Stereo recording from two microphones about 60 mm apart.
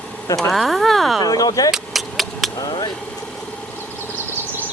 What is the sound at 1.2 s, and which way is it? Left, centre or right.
Speech, left.